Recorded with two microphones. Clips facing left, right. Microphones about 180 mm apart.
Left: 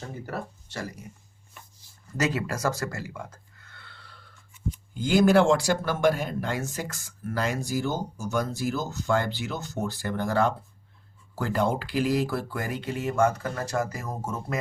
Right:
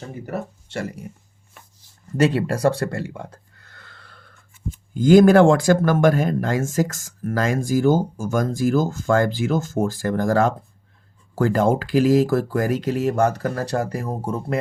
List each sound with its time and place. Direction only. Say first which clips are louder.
0.3 s speech: right 9 dB; 25° right (ahead or behind)
2.1 s speech: right 8 dB; 30° right (ahead or behind)